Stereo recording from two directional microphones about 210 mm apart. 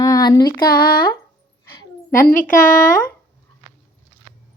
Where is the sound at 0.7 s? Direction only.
45° left (ahead or behind).